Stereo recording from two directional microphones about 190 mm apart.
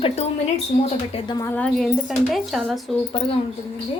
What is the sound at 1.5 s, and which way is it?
A woman's voice, 5° left (ahead or behind).